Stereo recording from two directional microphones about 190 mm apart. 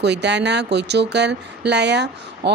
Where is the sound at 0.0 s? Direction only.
65° right (ahead or behind).